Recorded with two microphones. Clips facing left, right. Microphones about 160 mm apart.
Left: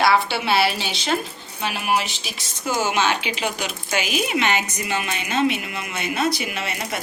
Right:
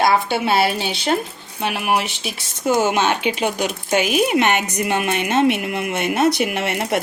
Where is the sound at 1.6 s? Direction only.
60° right (ahead or behind).